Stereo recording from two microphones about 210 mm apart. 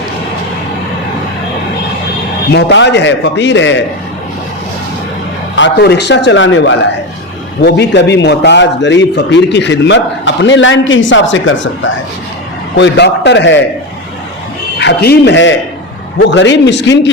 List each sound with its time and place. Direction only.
2.5 s a man's voice: 55° left (ahead or behind)
5.5 s a man's voice: 55° left (ahead or behind)
14.8 s a man's voice: 50° left (ahead or behind)